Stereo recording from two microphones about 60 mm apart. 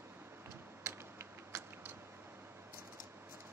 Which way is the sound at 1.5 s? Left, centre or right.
Right.